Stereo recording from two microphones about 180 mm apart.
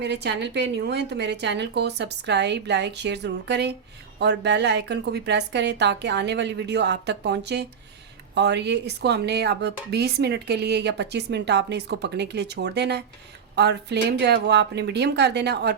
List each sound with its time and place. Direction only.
0.0 s a woman's voice: 70° right (ahead or behind)